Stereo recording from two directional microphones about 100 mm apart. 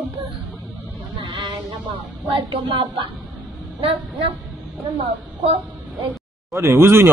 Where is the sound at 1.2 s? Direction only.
50° right (ahead or behind).